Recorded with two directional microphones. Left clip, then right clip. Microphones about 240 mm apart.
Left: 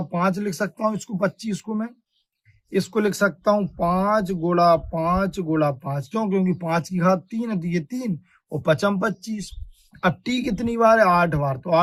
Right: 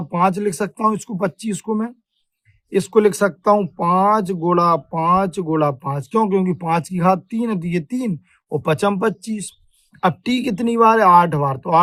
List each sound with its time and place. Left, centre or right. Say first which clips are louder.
0.1 s speech: right 7 dB; right